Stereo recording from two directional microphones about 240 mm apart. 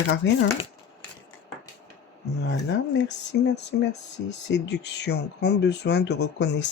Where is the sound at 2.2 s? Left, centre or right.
Left.